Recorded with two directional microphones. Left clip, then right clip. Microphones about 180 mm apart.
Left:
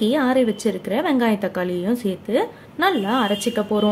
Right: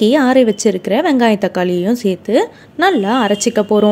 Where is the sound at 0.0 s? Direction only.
35° right (ahead or behind).